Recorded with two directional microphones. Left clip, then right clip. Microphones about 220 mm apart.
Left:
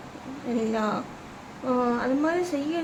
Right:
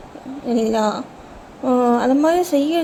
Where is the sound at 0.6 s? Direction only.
20° right (ahead or behind).